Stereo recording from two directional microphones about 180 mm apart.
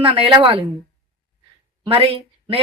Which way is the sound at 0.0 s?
30° right (ahead or behind).